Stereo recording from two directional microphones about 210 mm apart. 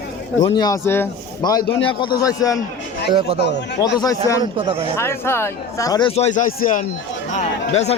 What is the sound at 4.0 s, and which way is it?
Speech, 15° left (ahead or behind).